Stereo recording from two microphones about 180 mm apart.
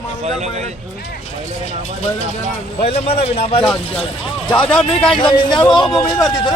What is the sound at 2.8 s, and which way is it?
Speech, 30° left (ahead or behind).